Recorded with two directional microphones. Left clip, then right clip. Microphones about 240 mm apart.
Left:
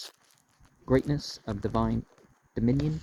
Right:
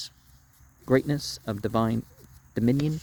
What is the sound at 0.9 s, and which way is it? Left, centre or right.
Speech, right.